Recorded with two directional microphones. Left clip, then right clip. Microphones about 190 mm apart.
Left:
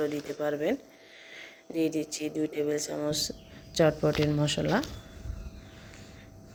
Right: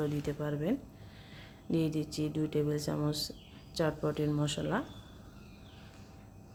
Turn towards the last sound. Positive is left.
turn(degrees=10)  # may be behind; listen again after turning